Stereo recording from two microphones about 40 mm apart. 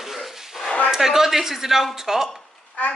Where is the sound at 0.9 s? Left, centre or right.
Centre.